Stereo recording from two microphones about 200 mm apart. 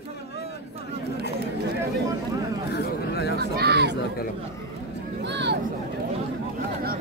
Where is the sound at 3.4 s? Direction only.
55° right (ahead or behind).